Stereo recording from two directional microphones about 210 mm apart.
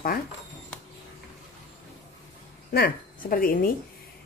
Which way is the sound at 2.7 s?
45° left (ahead or behind).